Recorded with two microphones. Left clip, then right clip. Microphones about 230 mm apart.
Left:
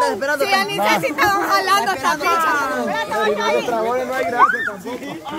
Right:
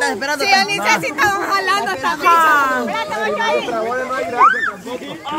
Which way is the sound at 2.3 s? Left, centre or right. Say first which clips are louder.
Right 5 dB; centre.